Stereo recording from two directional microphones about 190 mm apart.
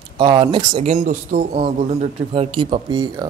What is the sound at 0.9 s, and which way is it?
Speech, 45° right (ahead or behind).